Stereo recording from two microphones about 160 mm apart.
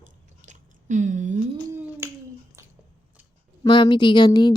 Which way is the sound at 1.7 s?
15° right (ahead or behind).